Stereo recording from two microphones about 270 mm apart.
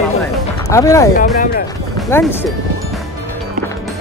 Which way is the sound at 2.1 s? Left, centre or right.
Centre.